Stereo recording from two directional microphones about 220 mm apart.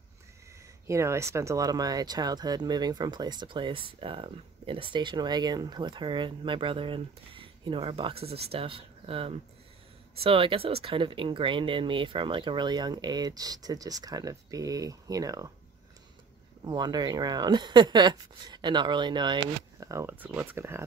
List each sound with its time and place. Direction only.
0.8 s speech: 15° right (ahead or behind)
16.6 s speech: 20° right (ahead or behind)